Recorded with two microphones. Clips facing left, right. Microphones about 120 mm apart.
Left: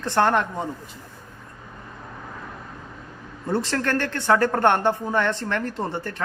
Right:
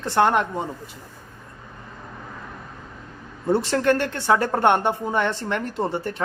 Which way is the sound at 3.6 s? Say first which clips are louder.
Right 4 dB; 20° right (ahead or behind).